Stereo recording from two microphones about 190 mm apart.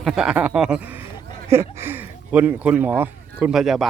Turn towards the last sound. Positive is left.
turn(degrees=0)  # may be behind; listen again after turning